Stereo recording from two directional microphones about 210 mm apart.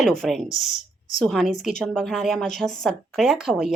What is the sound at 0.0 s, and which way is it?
Speech, centre (ahead or behind).